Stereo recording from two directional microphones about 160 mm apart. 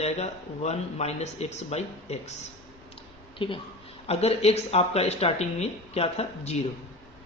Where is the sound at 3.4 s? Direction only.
35° left (ahead or behind).